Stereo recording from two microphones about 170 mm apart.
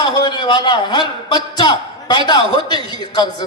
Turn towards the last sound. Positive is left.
turn(degrees=25)  # may be behind; listen again after turning